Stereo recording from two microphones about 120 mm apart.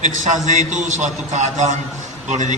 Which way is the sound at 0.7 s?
90° right.